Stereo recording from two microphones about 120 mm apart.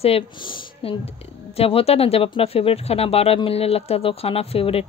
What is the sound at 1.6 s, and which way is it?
A woman's voice, 55° left (ahead or behind).